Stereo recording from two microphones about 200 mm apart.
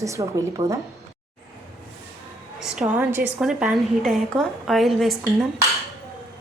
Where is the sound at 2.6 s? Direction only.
5° right (ahead or behind).